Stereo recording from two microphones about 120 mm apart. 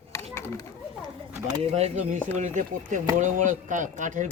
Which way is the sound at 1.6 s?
60° right (ahead or behind).